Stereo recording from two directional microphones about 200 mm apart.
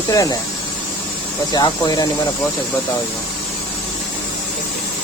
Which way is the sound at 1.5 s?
20° left (ahead or behind).